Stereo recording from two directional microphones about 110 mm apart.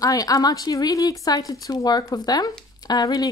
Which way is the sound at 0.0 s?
35° left (ahead or behind).